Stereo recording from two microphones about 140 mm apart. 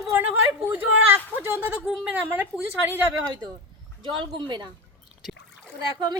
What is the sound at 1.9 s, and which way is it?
A woman's voice, 10° right (ahead or behind).